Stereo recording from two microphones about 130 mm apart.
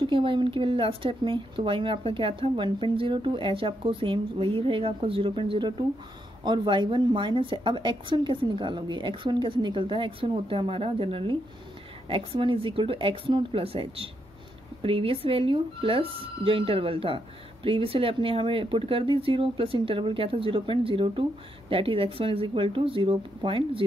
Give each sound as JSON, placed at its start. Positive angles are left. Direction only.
{"t": 0.0, "sound": "speech", "side_deg": -40}